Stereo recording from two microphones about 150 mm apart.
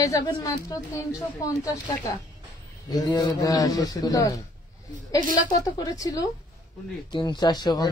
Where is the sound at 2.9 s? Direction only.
25° left (ahead or behind).